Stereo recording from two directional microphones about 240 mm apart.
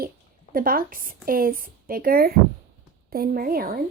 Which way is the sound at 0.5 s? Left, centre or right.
Right.